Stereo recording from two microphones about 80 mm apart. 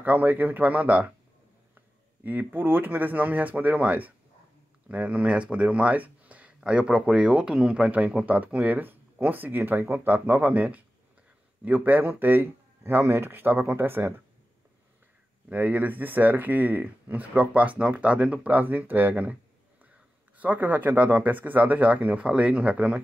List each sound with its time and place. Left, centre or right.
0.0 s speech: right
2.2 s speech: right
15.5 s speech: right
20.3 s speech: centre